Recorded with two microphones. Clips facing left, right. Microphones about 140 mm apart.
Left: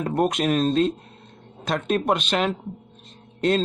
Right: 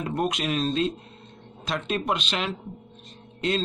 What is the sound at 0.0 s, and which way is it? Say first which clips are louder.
Speech: left 5 dB; 45° left (ahead or behind).